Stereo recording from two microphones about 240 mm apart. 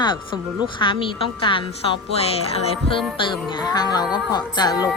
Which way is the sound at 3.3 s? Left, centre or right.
Centre.